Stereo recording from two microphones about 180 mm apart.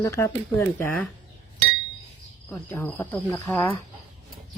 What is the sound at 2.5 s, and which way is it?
Speech, 10° left (ahead or behind).